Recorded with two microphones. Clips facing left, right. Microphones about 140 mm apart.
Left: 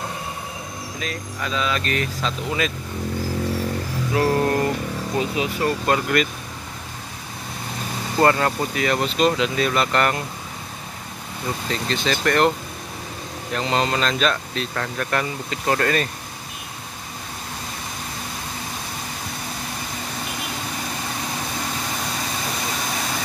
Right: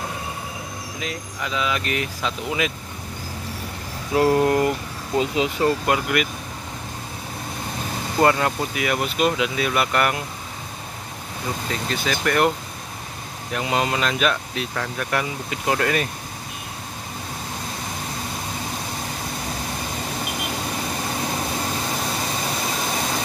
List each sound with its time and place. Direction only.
0.9 s speech: 20° right (ahead or behind)
4.1 s speech: 20° right (ahead or behind)
8.2 s speech: 10° right (ahead or behind)
11.9 s speech: 10° right (ahead or behind)
13.6 s speech: 10° right (ahead or behind)